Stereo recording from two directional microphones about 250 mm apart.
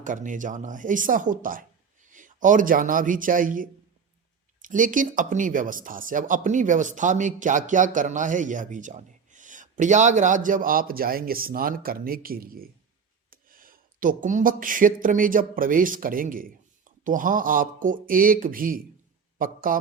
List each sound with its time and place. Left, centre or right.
0.0 s a man's voice: right